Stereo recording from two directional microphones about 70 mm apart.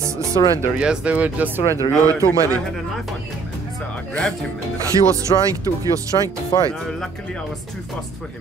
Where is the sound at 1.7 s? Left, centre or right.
Right.